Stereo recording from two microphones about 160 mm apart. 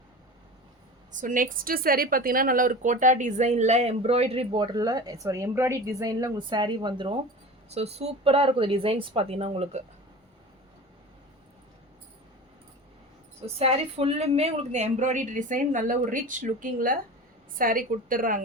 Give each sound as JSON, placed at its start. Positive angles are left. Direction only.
{"t": 1.1, "sound": "a woman's voice", "side_deg": -55}
{"t": 7.7, "sound": "a woman's voice", "side_deg": -40}
{"t": 13.4, "sound": "a woman's voice", "side_deg": -40}